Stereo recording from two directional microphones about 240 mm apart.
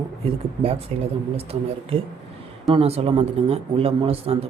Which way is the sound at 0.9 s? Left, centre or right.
Right.